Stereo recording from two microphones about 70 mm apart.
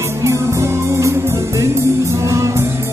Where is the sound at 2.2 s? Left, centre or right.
Right.